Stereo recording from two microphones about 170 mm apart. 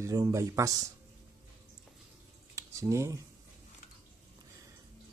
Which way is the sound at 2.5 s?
20° right (ahead or behind).